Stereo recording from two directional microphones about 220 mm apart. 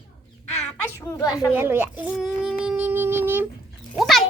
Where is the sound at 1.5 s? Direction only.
10° right (ahead or behind).